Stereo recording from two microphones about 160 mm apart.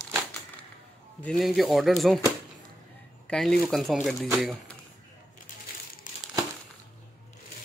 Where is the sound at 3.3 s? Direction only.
5° left (ahead or behind).